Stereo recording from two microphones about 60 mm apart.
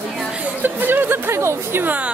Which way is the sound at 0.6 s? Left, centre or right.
Right.